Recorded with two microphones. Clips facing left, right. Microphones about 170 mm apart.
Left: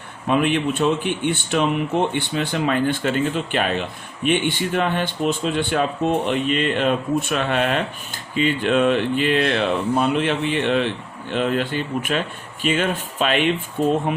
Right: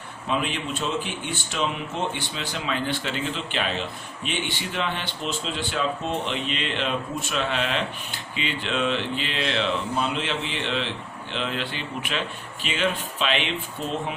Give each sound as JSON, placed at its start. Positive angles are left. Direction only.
{"t": 0.3, "sound": "speech", "side_deg": 55}